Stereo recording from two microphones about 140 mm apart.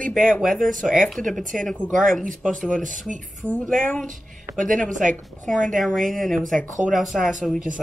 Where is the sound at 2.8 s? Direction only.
65° right (ahead or behind).